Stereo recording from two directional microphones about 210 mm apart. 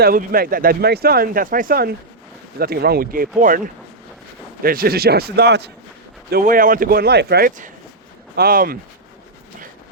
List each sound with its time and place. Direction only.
0.0 s speech: 45° right (ahead or behind)
4.6 s speech: 45° right (ahead or behind)
6.3 s speech: 40° right (ahead or behind)